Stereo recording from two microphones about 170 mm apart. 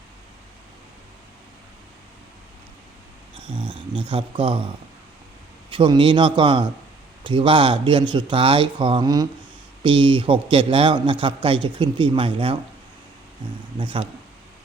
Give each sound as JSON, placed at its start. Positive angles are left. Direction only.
{"t": 3.3, "sound": "a man's voice", "side_deg": -30}
{"t": 5.7, "sound": "a man's voice", "side_deg": -30}
{"t": 13.7, "sound": "speech", "side_deg": -30}